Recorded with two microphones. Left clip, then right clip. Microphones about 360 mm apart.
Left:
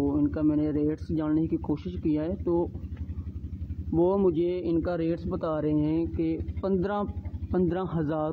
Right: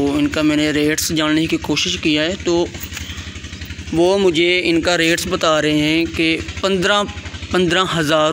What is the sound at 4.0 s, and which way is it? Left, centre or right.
Speech, left.